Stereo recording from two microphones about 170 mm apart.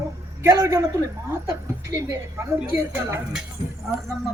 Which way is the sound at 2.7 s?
15° right (ahead or behind).